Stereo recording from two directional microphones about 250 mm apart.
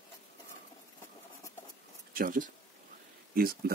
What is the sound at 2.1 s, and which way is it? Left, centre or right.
Speech, right.